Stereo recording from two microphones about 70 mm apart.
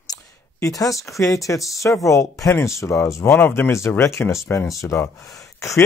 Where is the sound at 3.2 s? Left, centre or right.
Left.